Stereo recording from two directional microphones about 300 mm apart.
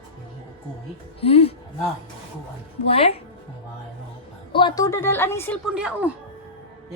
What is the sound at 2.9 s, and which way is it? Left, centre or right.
Speech, centre.